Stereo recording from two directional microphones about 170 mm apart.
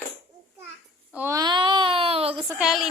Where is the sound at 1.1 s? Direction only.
15° right (ahead or behind); by 2.5 s 35° right (ahead or behind).